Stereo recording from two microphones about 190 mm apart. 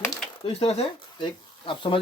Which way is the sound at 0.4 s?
30° left (ahead or behind).